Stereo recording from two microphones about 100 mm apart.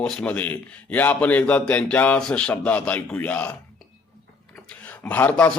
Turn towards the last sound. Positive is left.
turn(degrees=15)  # may be behind; listen again after turning